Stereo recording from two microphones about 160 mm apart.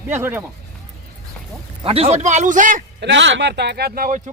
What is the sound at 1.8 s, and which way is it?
A man's voice, 35° right (ahead or behind).